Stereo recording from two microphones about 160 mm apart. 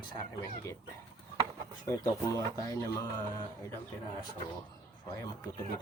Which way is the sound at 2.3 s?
20° left (ahead or behind).